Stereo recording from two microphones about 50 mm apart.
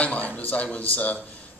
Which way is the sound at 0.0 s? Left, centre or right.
Left.